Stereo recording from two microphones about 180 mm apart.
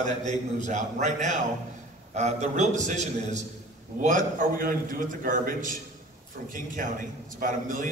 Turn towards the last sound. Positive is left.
turn(degrees=-45)  # may be behind; listen again after turning